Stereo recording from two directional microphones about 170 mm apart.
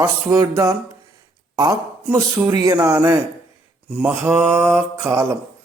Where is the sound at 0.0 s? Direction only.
20° right (ahead or behind).